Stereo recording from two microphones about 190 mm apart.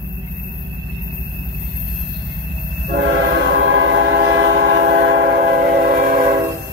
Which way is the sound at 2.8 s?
60° right (ahead or behind).